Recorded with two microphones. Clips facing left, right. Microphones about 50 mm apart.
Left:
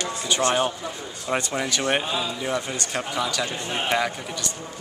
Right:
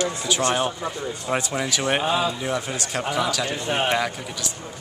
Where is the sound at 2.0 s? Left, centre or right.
Right.